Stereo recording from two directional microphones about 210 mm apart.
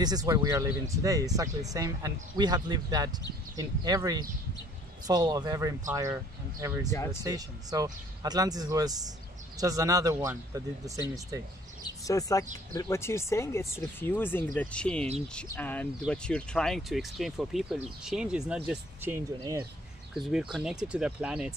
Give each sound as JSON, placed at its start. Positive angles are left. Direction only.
{"t": 0.0, "sound": "speech", "side_deg": -20}
{"t": 7.2, "sound": "speech", "side_deg": -15}
{"t": 11.8, "sound": "a sound", "side_deg": 15}
{"t": 12.7, "sound": "speech", "side_deg": 15}
{"t": 20.2, "sound": "speech", "side_deg": 0}